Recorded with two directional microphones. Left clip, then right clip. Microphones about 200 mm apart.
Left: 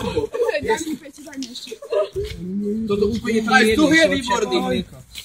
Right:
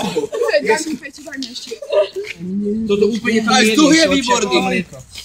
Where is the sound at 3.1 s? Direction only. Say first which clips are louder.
Right 2 dB; centre (ahead or behind).